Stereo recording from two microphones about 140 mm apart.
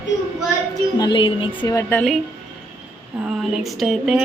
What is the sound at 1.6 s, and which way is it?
Speech, 20° left (ahead or behind).